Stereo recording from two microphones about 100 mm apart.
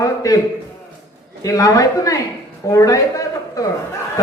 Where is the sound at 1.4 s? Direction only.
35° left (ahead or behind).